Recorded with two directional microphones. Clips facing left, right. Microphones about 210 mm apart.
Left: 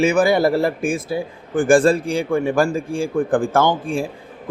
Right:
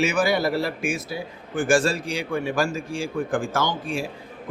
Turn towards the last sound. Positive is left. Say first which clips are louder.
# left 7 dB
turn(degrees=50)  # may be behind; listen again after turning